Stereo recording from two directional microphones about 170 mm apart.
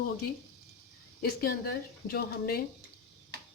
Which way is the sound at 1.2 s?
65° left (ahead or behind).